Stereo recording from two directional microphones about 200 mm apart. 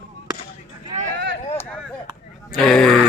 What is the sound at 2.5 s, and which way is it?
Speech, centre (ahead or behind).